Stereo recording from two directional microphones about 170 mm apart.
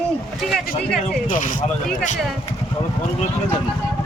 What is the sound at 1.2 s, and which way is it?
Speech, 50° left (ahead or behind).